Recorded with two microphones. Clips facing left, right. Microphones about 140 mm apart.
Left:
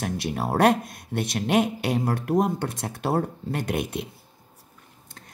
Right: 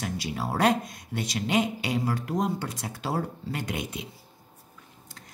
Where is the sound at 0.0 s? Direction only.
55° left (ahead or behind).